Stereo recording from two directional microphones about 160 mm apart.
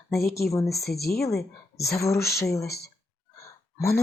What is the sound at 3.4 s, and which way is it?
Gasp, 15° left (ahead or behind).